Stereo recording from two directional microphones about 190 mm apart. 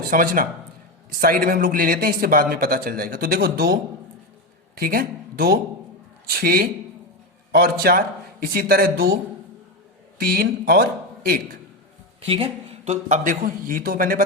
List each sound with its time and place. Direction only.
0.0 s speech: 45° right (ahead or behind)
4.8 s speech: 50° right (ahead or behind)
10.2 s speech: 55° right (ahead or behind)
12.2 s a man's voice: 30° right (ahead or behind); by 14.2 s 50° right (ahead or behind)